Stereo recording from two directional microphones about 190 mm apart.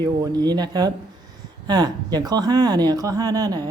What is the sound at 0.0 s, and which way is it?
A woman's voice, 20° right (ahead or behind).